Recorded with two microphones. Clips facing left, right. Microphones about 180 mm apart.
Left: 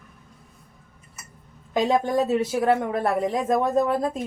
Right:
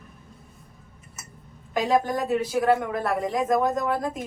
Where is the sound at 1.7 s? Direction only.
25° left (ahead or behind).